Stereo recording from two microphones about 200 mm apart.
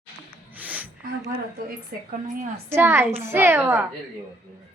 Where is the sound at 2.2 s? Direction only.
40° right (ahead or behind).